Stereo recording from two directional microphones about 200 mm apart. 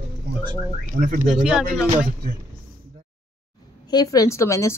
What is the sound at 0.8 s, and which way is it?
Speech, 40° right (ahead or behind).